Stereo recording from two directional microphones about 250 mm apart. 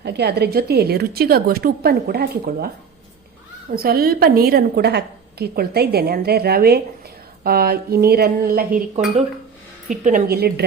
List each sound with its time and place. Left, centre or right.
0.0 s a woman's voice: right
3.7 s a woman's voice: right
9.9 s a woman's voice: right